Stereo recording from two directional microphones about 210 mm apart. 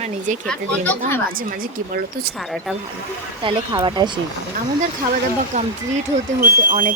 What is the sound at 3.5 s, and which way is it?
Speech, 20° right (ahead or behind).